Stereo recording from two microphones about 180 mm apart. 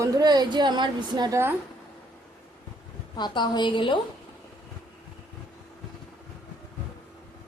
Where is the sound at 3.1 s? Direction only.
25° left (ahead or behind).